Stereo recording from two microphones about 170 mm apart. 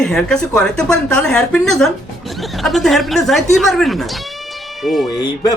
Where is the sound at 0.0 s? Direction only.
5° left (ahead or behind).